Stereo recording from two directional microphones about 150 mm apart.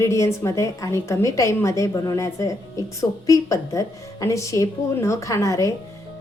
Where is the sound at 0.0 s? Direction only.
20° left (ahead or behind).